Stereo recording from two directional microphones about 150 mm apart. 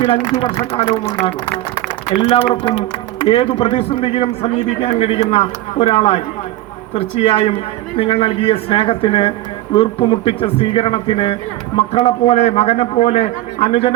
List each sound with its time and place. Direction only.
0.8 s a man's voice: 40° left (ahead or behind)
2.3 s a man's voice: 35° left (ahead or behind)